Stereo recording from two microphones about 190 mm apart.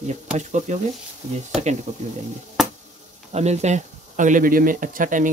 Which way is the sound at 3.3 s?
35° right (ahead or behind).